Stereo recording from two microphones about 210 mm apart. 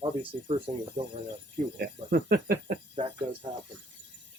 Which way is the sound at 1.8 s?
45° right (ahead or behind).